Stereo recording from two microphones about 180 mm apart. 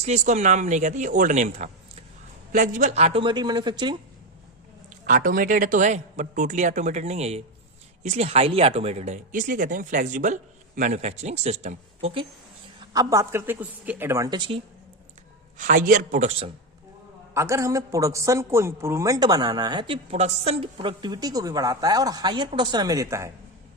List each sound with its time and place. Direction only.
0.0 s a man's voice: 40° right (ahead or behind)
2.9 s a man's voice: 35° right (ahead or behind)
5.0 s a man's voice: 50° right (ahead or behind); by 12.2 s 30° right (ahead or behind)
12.8 s a woman's voice: 20° right (ahead or behind)
15.5 s a man's voice: 45° right (ahead or behind)
17.3 s a man's voice: 15° right (ahead or behind)